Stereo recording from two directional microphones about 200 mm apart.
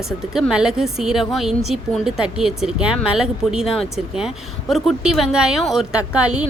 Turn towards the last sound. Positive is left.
turn(degrees=-5)  # may be behind; listen again after turning